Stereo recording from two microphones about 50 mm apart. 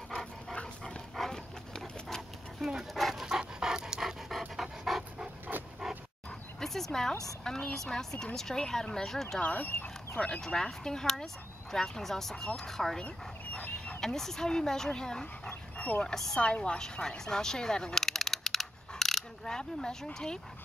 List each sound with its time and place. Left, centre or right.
0.1 s dog: centre
2.9 s pant: centre
6.6 s bow-wow: centre
7.7 s speech: centre
9.4 s a woman's voice: left
10.4 s speech: centre
13.0 s goose: left
14.0 s speech: centre
16.3 s a woman's voice: left
16.8 s a sound: centre